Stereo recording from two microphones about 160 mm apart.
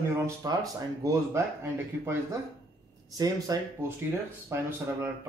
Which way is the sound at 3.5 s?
20° right (ahead or behind).